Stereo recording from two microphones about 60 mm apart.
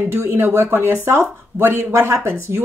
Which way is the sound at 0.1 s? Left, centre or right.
Right.